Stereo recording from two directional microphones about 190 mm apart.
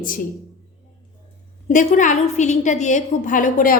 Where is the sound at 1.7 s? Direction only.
40° left (ahead or behind).